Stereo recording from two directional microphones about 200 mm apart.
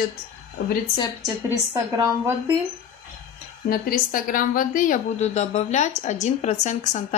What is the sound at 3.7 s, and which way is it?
A woman's voice, 45° left (ahead or behind).